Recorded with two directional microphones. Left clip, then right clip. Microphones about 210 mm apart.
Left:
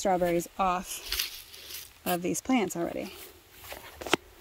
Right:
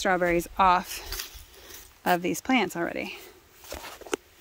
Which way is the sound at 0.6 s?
25° right (ahead or behind).